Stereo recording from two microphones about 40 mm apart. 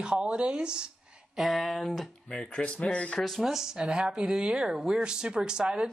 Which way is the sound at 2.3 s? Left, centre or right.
Left.